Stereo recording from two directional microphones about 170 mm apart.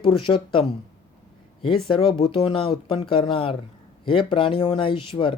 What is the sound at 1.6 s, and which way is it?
Speech, 30° left (ahead or behind).